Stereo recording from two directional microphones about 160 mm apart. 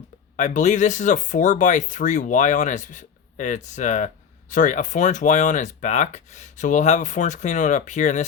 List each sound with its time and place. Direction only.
0.3 s speech: 50° left (ahead or behind)